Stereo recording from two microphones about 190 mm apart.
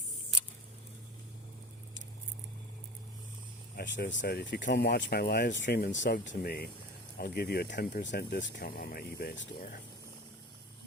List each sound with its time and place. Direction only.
3.8 s speech: 70° left (ahead or behind); by 9.8 s 50° left (ahead or behind)